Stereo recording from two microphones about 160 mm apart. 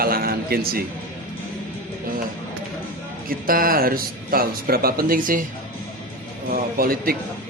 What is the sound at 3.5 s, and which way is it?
Speech, 65° right (ahead or behind).